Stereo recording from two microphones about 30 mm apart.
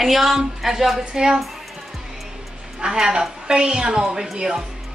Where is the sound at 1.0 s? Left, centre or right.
Right.